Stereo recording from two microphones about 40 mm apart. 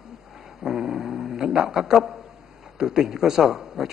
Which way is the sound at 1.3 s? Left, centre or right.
Centre.